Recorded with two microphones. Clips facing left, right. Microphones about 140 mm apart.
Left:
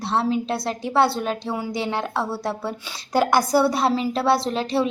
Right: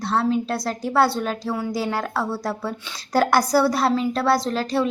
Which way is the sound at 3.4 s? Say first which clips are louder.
Even; 20° left (ahead or behind).